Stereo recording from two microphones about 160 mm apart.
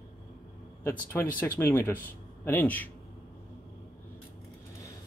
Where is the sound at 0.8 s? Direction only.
15° left (ahead or behind).